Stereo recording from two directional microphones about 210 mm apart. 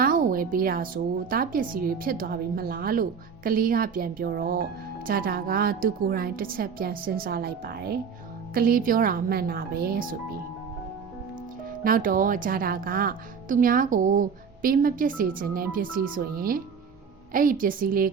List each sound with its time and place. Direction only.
0.0 s music: 40° right (ahead or behind)
1.3 s a woman's voice: 40° right (ahead or behind)
11.8 s a woman's voice: 40° right (ahead or behind)